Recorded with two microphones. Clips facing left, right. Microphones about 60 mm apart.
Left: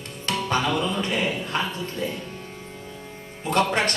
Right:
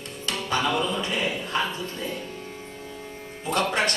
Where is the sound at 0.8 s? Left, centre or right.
Left.